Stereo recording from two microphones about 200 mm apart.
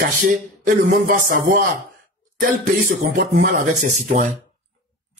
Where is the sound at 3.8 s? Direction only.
40° right (ahead or behind).